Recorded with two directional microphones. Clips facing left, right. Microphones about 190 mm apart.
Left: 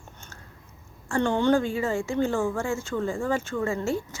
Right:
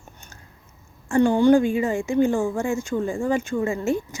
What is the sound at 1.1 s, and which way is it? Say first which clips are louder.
A woman's voice: right 6 dB; 10° right (ahead or behind).